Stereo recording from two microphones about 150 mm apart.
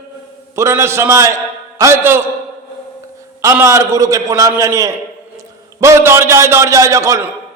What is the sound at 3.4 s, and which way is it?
A man's voice, 20° right (ahead or behind).